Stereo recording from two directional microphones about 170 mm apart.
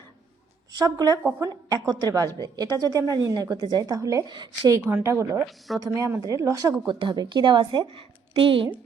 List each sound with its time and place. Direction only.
0.8 s a woman's voice: 20° right (ahead or behind)
4.9 s speech: 10° right (ahead or behind)
5.5 s a woman's voice: centre (ahead or behind)
5.9 s a woman's voice: 20° right (ahead or behind)